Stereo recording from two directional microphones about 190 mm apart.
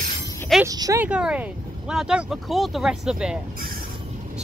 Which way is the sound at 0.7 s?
20° right (ahead or behind).